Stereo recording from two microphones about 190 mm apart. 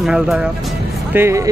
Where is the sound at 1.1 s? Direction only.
15° right (ahead or behind).